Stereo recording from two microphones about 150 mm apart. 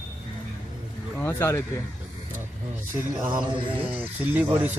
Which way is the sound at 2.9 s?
15° right (ahead or behind).